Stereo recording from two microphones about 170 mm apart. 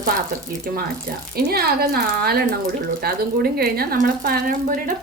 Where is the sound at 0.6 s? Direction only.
60° right (ahead or behind).